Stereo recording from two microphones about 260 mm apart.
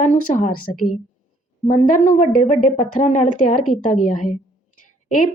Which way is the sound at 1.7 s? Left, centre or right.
Left.